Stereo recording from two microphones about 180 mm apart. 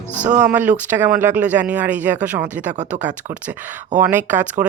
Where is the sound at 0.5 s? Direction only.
10° right (ahead or behind).